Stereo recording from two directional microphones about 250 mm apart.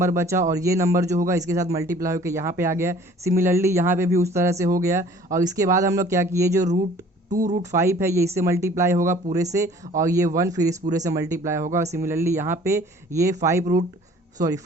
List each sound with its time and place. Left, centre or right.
0.0 s speech: centre
7.3 s speech: right
7.6 s speech: centre